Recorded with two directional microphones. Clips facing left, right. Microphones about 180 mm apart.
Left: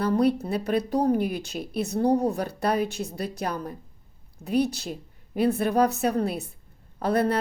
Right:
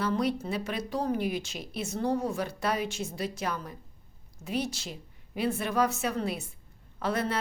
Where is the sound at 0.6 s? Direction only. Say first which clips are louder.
Left 8 dB; 35° left (ahead or behind).